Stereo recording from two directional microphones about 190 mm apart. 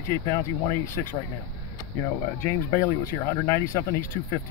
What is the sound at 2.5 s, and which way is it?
Speech, 15° left (ahead or behind).